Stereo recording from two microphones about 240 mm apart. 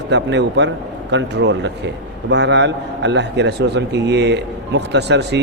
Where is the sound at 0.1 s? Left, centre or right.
Right.